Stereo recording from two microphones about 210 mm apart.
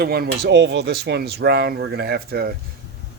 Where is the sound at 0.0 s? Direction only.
50° right (ahead or behind).